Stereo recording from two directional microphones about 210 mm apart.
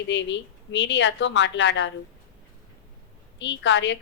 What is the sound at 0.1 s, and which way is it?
A woman's voice, 60° left (ahead or behind).